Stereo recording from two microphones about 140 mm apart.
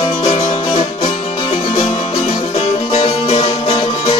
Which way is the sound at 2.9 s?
40° left (ahead or behind).